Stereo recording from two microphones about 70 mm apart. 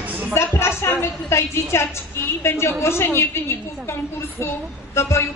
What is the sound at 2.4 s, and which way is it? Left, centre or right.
Speech, left.